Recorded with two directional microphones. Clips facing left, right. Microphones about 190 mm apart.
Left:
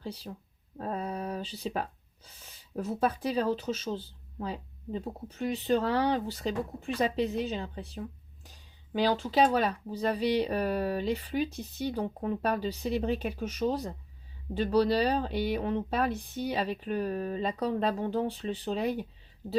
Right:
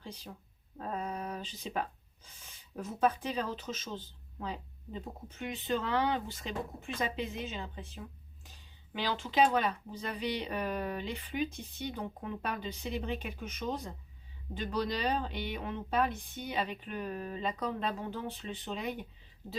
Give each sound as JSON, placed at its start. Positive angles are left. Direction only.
{"t": 0.0, "sound": "speech", "side_deg": 35}